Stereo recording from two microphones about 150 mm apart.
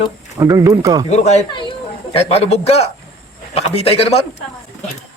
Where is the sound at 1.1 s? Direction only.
50° left (ahead or behind).